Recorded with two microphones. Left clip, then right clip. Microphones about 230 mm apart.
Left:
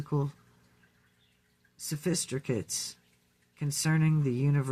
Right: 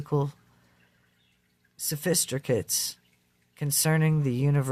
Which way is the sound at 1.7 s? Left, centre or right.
Right.